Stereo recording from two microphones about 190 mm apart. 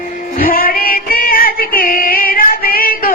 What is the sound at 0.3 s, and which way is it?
Music, 50° left (ahead or behind).